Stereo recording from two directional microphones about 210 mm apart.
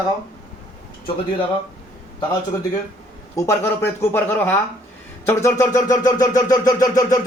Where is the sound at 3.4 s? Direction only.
10° left (ahead or behind).